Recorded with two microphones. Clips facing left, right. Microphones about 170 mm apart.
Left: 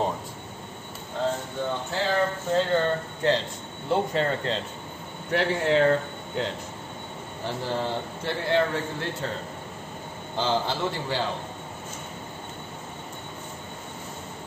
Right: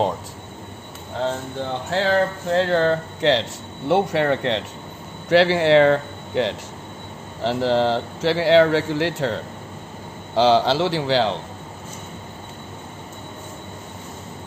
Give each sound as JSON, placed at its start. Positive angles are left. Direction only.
{"t": 1.9, "sound": "speech", "side_deg": -80}
{"t": 7.4, "sound": "a man's voice", "side_deg": -90}